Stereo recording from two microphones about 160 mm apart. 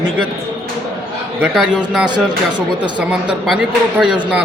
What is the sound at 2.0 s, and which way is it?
Speech, 30° right (ahead or behind).